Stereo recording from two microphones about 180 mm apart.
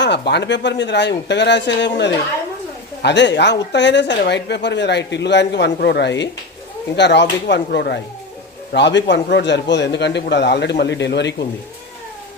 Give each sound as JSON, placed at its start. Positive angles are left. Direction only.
{"t": 0.0, "sound": "a woman's voice", "side_deg": 70}